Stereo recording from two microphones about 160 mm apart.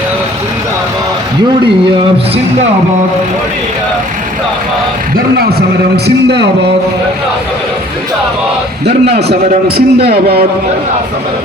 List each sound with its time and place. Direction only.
5.1 s speech: 75° right (ahead or behind)
6.2 s speech: 90° right
9.6 s a man's voice: 80° right